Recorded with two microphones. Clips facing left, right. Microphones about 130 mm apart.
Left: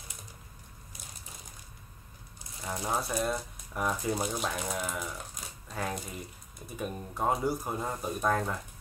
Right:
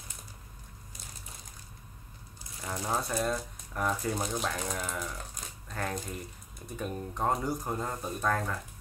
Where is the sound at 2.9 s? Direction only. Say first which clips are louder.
Even; 5° left (ahead or behind).